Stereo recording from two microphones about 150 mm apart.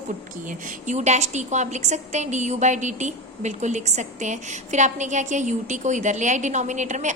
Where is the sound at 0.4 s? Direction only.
50° right (ahead or behind).